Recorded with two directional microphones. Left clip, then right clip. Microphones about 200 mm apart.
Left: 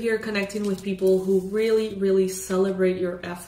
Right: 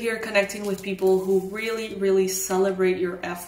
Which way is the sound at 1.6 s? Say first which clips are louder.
Left 5 dB; 25° right (ahead or behind).